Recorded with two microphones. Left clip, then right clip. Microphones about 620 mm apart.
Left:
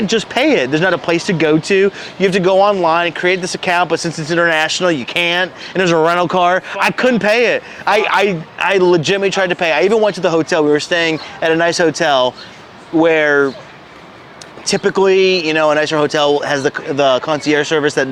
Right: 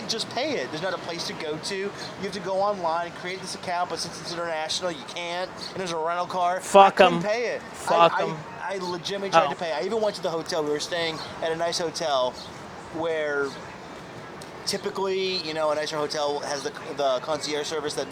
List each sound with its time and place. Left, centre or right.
0.1 s speech: left
2.3 s speech: left
13.0 s speech: left
14.7 s speech: left